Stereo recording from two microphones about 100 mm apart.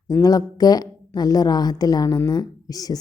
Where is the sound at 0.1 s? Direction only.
35° left (ahead or behind).